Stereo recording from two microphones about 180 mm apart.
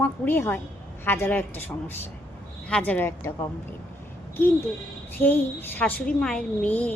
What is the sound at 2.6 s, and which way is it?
Speech, 5° left (ahead or behind).